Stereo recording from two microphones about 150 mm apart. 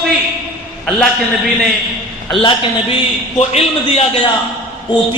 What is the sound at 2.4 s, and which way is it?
A woman's voice, 35° left (ahead or behind).